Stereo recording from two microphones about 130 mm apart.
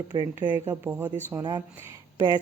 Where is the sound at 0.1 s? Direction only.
30° right (ahead or behind).